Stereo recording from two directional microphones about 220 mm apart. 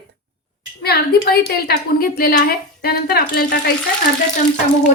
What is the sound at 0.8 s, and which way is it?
A woman's voice, 45° left (ahead or behind).